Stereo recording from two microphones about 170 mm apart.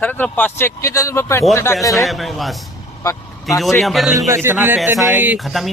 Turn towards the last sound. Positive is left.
turn(degrees=0)  # may be behind; listen again after turning